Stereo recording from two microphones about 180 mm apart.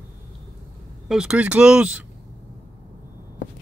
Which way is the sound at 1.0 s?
5° right (ahead or behind).